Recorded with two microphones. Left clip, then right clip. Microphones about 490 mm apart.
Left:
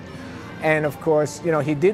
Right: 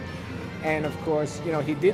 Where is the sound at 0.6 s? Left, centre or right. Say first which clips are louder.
Left 7 dB; left.